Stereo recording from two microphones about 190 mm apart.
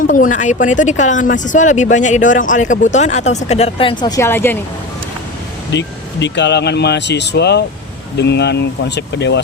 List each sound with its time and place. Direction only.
0.1 s speech: 45° left (ahead or behind); by 4.5 s 10° left (ahead or behind)
5.7 s speech: 70° left (ahead or behind)